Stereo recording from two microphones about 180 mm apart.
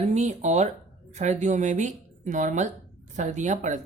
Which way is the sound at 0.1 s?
40° right (ahead or behind).